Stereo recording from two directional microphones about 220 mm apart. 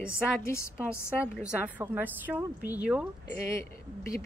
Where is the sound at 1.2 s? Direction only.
5° right (ahead or behind).